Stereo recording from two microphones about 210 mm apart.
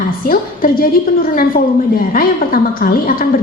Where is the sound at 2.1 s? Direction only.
40° left (ahead or behind).